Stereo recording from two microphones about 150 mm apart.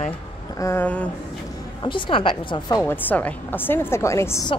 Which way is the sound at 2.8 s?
15° left (ahead or behind).